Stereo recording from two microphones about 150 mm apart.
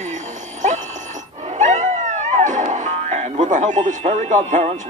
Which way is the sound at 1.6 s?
55° right (ahead or behind).